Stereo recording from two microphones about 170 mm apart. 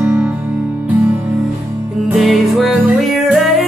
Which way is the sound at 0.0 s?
5° right (ahead or behind).